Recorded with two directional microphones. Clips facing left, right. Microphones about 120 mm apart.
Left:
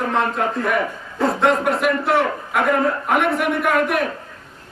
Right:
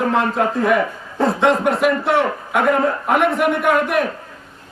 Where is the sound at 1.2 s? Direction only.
Centre (ahead or behind).